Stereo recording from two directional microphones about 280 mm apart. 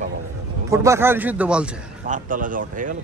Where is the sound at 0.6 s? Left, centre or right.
Centre.